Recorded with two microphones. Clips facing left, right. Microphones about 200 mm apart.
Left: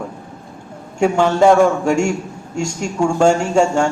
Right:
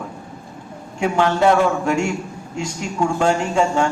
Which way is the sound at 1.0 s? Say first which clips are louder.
Left 4 dB; 45° left (ahead or behind).